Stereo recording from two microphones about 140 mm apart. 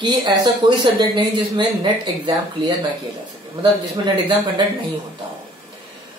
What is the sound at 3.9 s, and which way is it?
Speech, 35° right (ahead or behind).